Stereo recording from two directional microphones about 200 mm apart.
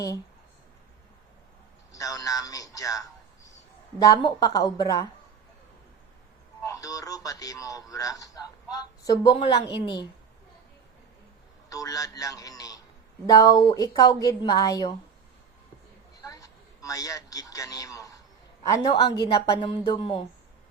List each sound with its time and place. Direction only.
1.9 s a sound: 15° left (ahead or behind)
4.0 s a woman's voice: 20° left (ahead or behind)
6.7 s radio: 15° left (ahead or behind)
11.7 s a man's voice: 15° left (ahead or behind)
16.2 s a sound: 15° left (ahead or behind)
18.7 s a woman's voice: 20° left (ahead or behind)